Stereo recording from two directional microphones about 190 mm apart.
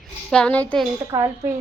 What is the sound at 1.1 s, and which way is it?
Speech, 15° right (ahead or behind).